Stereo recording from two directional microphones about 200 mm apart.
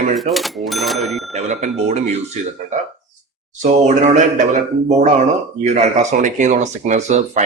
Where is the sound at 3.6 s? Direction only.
35° right (ahead or behind).